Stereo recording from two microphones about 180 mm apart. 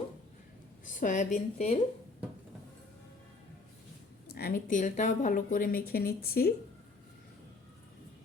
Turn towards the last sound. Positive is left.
turn(degrees=55)  # may be behind; listen again after turning